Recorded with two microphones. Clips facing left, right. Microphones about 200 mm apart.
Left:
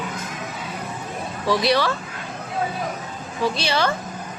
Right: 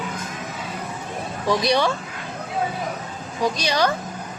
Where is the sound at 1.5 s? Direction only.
20° right (ahead or behind).